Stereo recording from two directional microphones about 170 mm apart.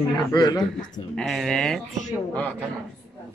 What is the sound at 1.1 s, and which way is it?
Speech, centre (ahead or behind).